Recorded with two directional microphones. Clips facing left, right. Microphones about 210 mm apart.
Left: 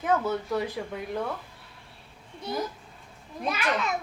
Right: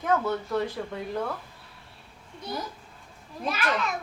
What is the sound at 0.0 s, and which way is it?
Speech, 5° left (ahead or behind).